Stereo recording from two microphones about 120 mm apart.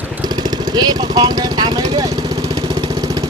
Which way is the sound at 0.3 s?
35° right (ahead or behind).